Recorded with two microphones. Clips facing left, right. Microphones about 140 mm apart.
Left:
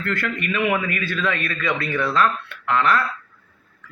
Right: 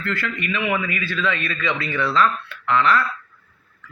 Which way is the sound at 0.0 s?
50° left (ahead or behind).